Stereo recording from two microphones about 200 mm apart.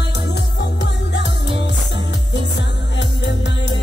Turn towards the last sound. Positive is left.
turn(degrees=60)  # may be behind; listen again after turning